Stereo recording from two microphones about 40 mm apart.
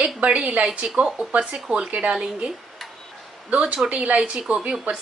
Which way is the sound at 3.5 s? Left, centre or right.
Right.